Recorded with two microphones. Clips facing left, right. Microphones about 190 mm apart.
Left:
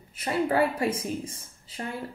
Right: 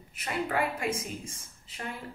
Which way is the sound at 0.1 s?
30° left (ahead or behind).